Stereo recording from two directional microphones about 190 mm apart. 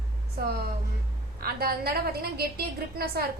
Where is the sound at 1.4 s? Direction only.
55° right (ahead or behind).